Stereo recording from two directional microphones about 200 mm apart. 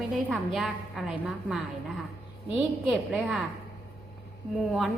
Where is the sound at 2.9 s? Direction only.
Centre (ahead or behind).